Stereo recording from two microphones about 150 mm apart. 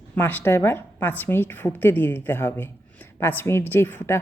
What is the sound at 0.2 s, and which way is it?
Speech, 15° left (ahead or behind).